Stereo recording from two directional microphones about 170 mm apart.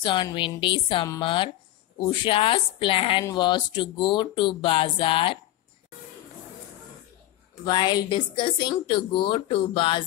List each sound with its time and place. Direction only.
0.0 s a woman's voice: 25° left (ahead or behind)
7.6 s a woman's voice: 25° left (ahead or behind)